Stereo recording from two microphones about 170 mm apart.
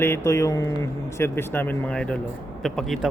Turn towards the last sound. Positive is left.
turn(degrees=0)  # may be behind; listen again after turning